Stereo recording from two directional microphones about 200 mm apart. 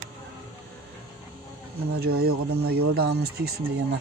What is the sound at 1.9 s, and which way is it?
Speech, 50° right (ahead or behind).